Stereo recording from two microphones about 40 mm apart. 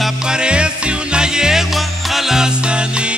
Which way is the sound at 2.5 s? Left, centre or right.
Right.